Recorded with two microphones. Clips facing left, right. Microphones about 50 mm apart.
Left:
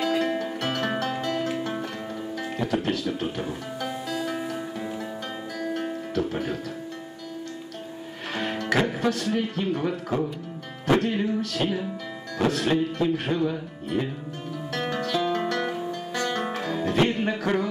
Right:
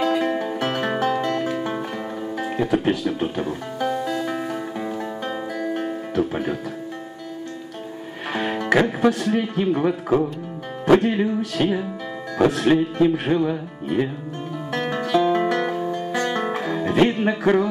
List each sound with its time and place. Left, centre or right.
0.0 s music: centre
8.3 s speech: centre
10.9 s music: centre
16.2 s guitar: centre
17.1 s music: centre